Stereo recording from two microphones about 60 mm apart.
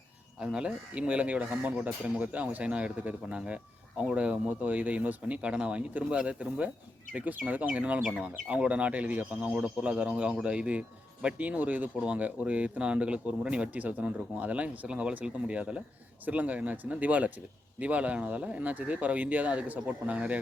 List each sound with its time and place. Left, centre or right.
0.3 s speech: centre